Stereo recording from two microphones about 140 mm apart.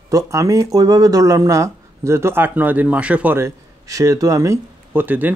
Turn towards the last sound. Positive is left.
turn(degrees=-15)  # may be behind; listen again after turning